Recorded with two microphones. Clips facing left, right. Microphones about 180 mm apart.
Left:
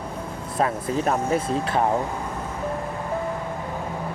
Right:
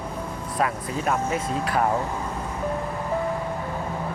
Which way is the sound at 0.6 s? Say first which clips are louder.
Left 3 dB; 35° left (ahead or behind).